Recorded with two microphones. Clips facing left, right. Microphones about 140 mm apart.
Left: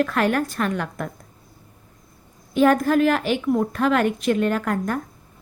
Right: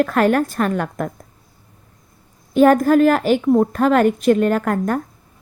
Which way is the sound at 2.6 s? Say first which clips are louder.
Right 5 dB; 45° right (ahead or behind).